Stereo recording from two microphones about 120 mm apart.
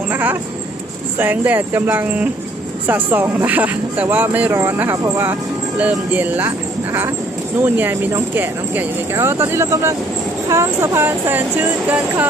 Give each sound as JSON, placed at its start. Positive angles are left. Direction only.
{"t": 0.1, "sound": "a sound", "side_deg": -15}
{"t": 1.2, "sound": "speech", "side_deg": -15}
{"t": 7.6, "sound": "speech", "side_deg": -15}